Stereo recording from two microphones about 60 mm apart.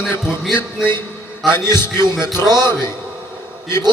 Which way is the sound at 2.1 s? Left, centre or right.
Centre.